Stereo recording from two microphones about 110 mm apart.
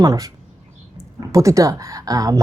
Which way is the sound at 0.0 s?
35° right (ahead or behind).